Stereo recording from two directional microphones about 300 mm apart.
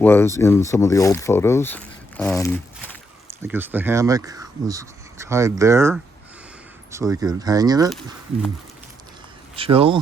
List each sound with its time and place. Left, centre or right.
0.0 s speech: centre
3.2 s speech: centre
6.9 s speech: centre
9.6 s speech: centre